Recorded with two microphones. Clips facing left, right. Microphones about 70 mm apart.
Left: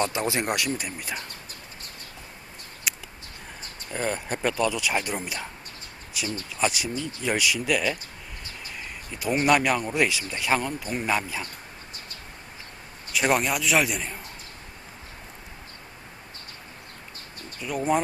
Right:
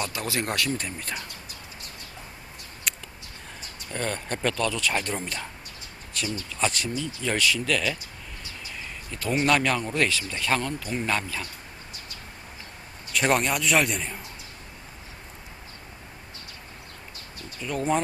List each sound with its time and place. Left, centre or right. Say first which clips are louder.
0.0 s speech: left 4 dB; left
2.9 s a sound: even; centre
3.9 s speech: left 2 dB; centre
9.4 s speech: left 2 dB; centre
13.1 s a man's voice: even; centre
17.6 s speech: left 1 dB; centre